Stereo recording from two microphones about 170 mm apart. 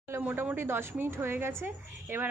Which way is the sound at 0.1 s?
10° right (ahead or behind).